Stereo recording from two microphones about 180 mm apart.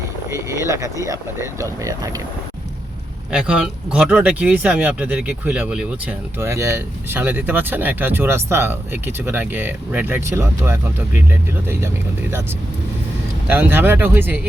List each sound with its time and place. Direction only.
0.6 s speech: 15° right (ahead or behind)
3.3 s speech: 5° right (ahead or behind)
13.5 s speech: 10° right (ahead or behind)